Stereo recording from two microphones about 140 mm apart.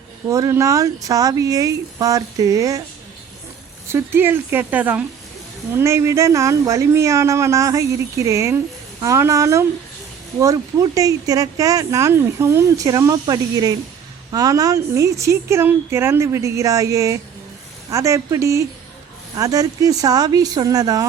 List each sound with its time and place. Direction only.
0.3 s speech: 25° right (ahead or behind)
3.8 s a woman's voice: 15° right (ahead or behind)